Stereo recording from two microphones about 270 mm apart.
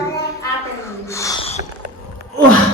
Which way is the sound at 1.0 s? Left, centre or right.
Centre.